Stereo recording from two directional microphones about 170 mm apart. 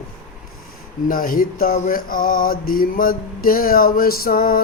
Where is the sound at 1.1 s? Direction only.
55° left (ahead or behind).